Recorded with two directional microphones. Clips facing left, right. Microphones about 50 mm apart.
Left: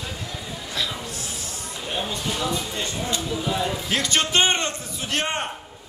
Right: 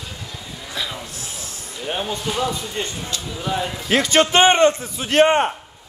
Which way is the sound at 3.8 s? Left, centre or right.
Right.